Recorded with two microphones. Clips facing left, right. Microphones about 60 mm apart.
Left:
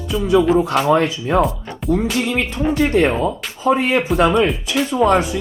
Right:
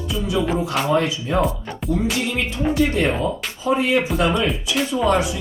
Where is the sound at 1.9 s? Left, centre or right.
Left.